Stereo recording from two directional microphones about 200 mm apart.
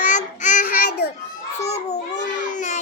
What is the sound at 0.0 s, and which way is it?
Child singing, 40° left (ahead or behind).